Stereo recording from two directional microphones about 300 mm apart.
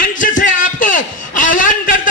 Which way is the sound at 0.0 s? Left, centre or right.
Left.